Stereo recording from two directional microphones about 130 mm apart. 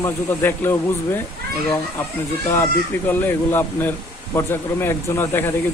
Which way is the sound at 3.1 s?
15° left (ahead or behind).